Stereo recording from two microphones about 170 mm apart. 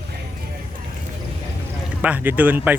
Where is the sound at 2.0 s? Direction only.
10° right (ahead or behind).